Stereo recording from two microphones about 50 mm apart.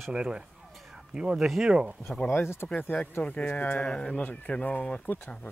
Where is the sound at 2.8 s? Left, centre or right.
Left.